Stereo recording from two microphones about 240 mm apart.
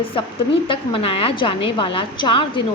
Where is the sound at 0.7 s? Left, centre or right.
Left.